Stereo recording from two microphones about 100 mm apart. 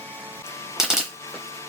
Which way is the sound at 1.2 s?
30° left (ahead or behind).